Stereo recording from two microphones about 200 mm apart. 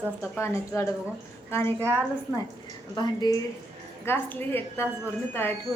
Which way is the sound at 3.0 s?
20° left (ahead or behind).